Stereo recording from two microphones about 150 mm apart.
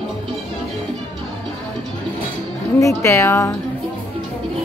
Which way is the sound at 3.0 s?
20° left (ahead or behind).